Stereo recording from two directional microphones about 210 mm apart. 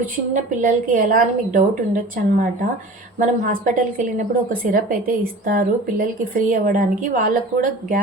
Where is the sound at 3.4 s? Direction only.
40° right (ahead or behind).